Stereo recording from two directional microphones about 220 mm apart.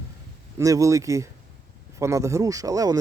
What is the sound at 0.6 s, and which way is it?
Speech, 15° right (ahead or behind).